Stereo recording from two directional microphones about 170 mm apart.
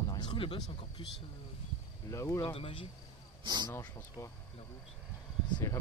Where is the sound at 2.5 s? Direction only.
30° left (ahead or behind).